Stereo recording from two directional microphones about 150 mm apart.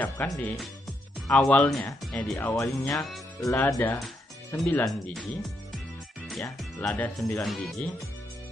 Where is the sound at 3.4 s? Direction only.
20° left (ahead or behind).